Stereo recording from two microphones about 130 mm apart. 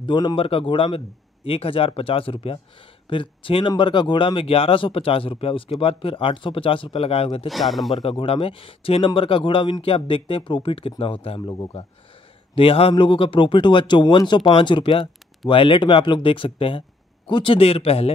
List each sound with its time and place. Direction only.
0.0 s speech: 35° left (ahead or behind)
7.4 s speech: centre (ahead or behind)
7.9 s speech: 45° left (ahead or behind)
11.5 s a man's voice: 30° left (ahead or behind)
12.5 s a man's voice: 45° left (ahead or behind)